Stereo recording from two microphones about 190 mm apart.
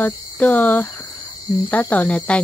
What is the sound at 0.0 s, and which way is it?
Speech, 10° left (ahead or behind).